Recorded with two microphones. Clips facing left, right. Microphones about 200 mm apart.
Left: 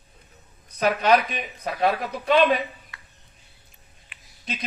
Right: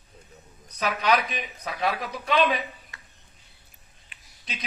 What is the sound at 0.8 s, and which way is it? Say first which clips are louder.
Speech: left 5 dB; 35° left (ahead or behind).